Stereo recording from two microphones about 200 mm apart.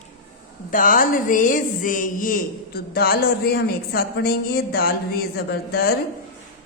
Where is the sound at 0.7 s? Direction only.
45° left (ahead or behind).